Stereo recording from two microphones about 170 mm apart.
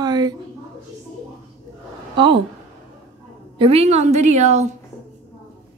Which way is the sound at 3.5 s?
35° right (ahead or behind).